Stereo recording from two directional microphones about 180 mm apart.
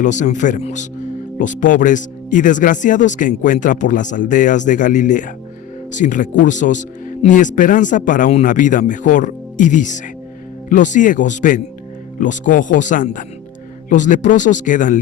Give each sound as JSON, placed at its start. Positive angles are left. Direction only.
{"t": 0.0, "sound": "speech", "side_deg": 40}